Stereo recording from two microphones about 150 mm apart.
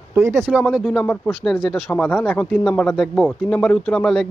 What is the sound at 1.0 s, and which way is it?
Speech, 5° left (ahead or behind).